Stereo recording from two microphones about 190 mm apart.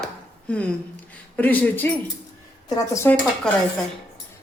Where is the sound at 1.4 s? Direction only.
10° left (ahead or behind).